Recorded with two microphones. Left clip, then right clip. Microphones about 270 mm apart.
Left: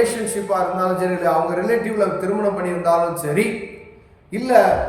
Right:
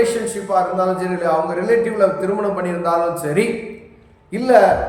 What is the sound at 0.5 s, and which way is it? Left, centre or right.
A man's voice, centre.